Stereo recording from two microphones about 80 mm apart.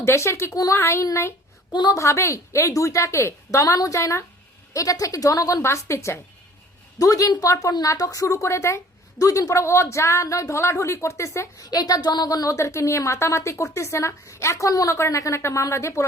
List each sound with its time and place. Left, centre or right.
0.0 s speech: left
0.5 s a woman's voice: left
0.8 s a woman's voice: left
5.6 s speech: left
7.0 s a woman's voice: left
9.1 s speech: left
11.6 s speech: left